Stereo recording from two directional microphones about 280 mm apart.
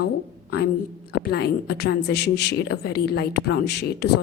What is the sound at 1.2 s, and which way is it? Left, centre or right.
A woman's voice, left.